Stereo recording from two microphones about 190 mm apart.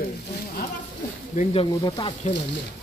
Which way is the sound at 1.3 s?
35° left (ahead or behind).